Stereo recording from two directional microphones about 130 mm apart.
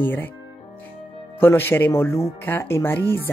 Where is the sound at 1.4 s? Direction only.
15° left (ahead or behind).